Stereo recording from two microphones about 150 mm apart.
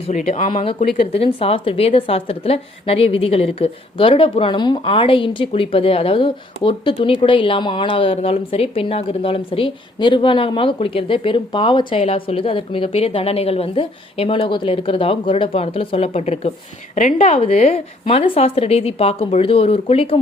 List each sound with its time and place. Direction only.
0.1 s speech: 55° left (ahead or behind)
0.6 s a woman's voice: 40° left (ahead or behind)